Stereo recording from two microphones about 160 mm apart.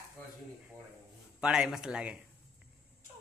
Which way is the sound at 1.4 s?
5° right (ahead or behind).